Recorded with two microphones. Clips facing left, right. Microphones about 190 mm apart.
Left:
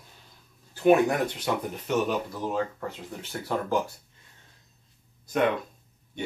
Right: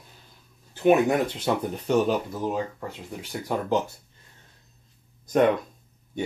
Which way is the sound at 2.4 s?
15° right (ahead or behind).